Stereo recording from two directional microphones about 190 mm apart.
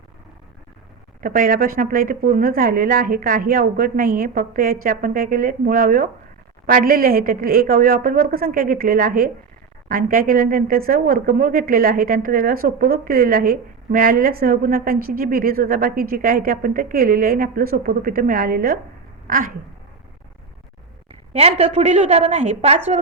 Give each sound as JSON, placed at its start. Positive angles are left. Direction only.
{"t": 1.2, "sound": "speech", "side_deg": -50}
{"t": 21.3, "sound": "a woman's voice", "side_deg": -35}